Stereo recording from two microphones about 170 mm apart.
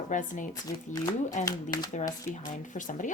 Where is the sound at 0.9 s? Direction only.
20° left (ahead or behind).